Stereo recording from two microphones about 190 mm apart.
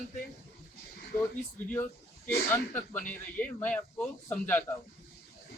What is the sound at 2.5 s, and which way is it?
Speech, 10° left (ahead or behind).